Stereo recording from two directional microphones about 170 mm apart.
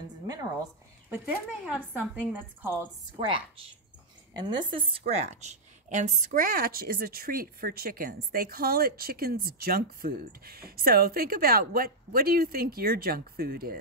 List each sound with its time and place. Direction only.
1.1 s a woman's voice: 10° right (ahead or behind)
3.2 s a woman's voice: 30° right (ahead or behind); by 13.7 s 60° right (ahead or behind)